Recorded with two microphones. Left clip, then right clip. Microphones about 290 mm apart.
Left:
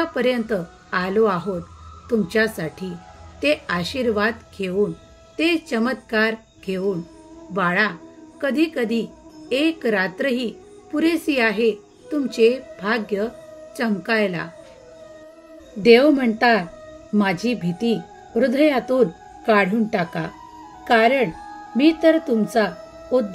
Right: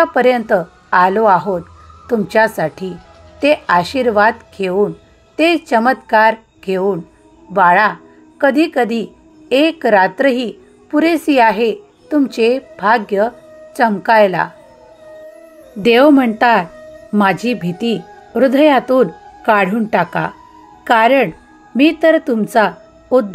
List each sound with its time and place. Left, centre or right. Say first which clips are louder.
0.0 s a woman's voice: right 9 dB; centre
2.5 s a woman's voice: right 10 dB; centre
15.8 s a woman's voice: right 4 dB; centre